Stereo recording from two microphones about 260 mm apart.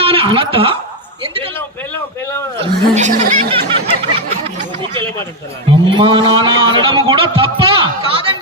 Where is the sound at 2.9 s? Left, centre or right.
Right.